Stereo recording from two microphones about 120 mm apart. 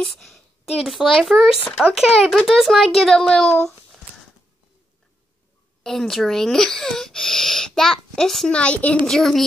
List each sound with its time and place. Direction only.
0.0 s speech: centre (ahead or behind)
5.9 s speech: centre (ahead or behind)